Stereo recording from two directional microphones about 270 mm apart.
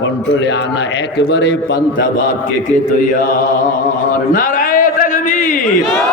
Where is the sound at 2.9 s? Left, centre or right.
Left.